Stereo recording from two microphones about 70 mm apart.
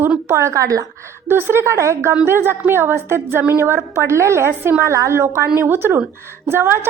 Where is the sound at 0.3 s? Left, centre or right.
Right.